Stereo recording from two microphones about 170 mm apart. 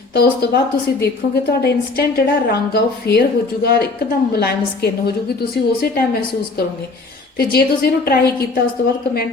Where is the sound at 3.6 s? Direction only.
60° left (ahead or behind).